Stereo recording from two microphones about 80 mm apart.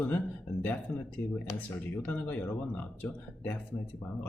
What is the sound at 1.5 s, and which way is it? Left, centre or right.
Speech, centre.